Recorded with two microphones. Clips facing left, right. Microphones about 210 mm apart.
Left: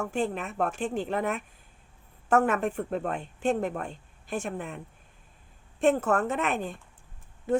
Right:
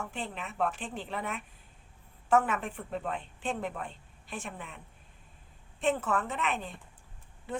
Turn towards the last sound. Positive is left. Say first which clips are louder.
# left 11 dB
turn(degrees=45)  # may be behind; listen again after turning